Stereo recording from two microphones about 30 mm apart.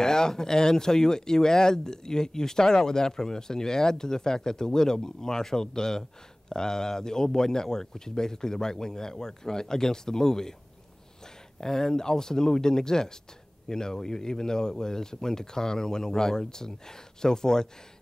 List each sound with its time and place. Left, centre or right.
0.0 s speech: left
11.6 s speech: left